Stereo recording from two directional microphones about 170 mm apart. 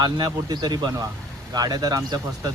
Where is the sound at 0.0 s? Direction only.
25° right (ahead or behind).